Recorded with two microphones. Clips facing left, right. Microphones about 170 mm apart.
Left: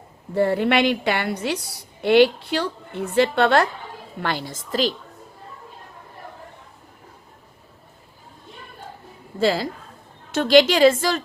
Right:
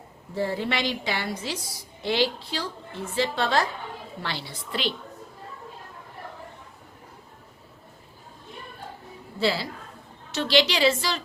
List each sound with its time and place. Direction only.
0.3 s a woman's voice: 60° left (ahead or behind)
4.2 s a woman's voice: 50° left (ahead or behind)
9.4 s a woman's voice: 45° left (ahead or behind)